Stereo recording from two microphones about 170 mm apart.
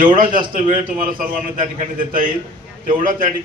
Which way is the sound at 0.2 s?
55° right (ahead or behind).